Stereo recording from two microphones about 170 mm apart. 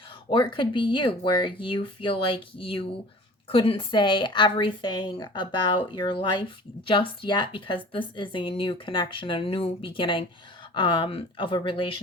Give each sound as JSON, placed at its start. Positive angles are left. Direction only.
{"t": 0.3, "sound": "a woman's voice", "side_deg": 30}